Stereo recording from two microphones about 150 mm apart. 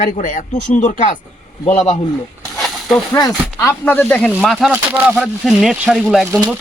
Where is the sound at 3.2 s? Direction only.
15° left (ahead or behind).